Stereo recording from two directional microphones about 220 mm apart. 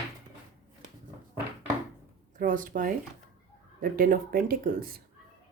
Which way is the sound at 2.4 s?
40° right (ahead or behind).